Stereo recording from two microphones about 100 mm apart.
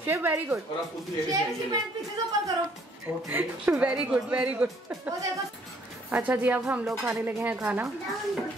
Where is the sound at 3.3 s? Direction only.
15° right (ahead or behind).